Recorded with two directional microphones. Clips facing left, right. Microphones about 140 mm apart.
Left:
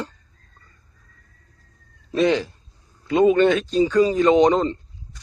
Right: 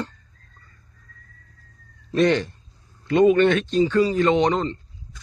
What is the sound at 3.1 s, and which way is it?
Speech, 10° left (ahead or behind).